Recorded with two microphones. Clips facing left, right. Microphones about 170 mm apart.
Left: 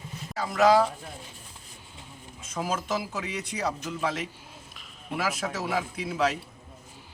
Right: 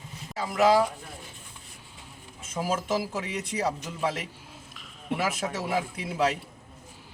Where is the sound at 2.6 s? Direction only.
30° right (ahead or behind).